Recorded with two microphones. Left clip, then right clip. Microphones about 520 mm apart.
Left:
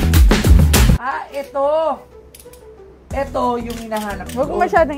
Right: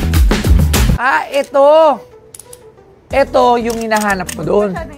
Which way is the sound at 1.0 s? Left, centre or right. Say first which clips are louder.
Right 10 dB; right.